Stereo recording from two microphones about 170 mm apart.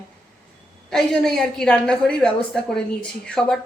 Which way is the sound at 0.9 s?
5° left (ahead or behind).